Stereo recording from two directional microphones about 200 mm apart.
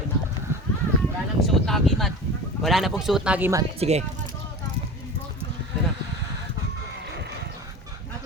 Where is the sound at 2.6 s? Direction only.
Centre (ahead or behind).